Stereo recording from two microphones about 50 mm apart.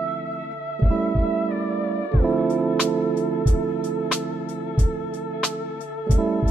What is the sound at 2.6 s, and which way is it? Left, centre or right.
Music, centre.